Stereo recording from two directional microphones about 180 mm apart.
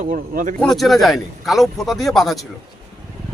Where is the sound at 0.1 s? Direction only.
45° right (ahead or behind).